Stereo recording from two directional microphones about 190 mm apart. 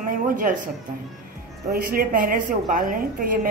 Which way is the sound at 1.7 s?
50° right (ahead or behind).